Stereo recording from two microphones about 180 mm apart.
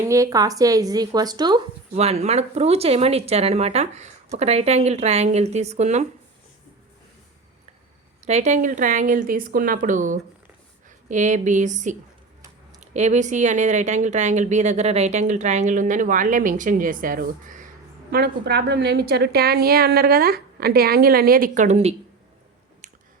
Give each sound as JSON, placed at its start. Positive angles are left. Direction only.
{"t": 0.0, "sound": "speech", "side_deg": -15}
{"t": 2.0, "sound": "speech", "side_deg": -35}
{"t": 8.2, "sound": "speech", "side_deg": -40}
{"t": 18.1, "sound": "a woman's voice", "side_deg": -60}